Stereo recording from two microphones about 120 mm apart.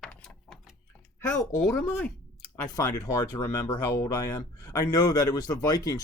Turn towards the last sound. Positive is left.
turn(degrees=30)  # may be behind; listen again after turning